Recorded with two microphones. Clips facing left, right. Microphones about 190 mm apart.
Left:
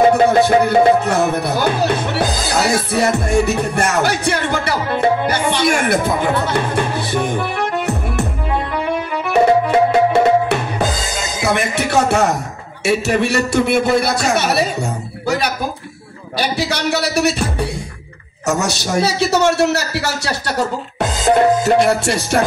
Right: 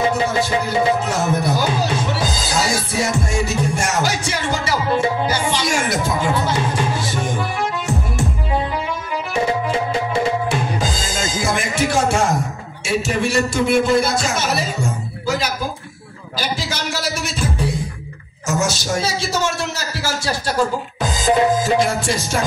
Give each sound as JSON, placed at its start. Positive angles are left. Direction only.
{"t": 0.1, "sound": "speech", "side_deg": 60}
{"t": 8.7, "sound": "music", "side_deg": 60}
{"t": 12.8, "sound": "a man's voice", "side_deg": 65}